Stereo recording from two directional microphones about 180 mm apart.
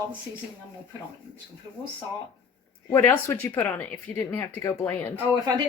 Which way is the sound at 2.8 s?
15° left (ahead or behind).